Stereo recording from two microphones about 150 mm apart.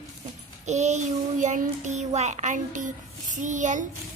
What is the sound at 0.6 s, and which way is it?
A child's voice, 50° right (ahead or behind).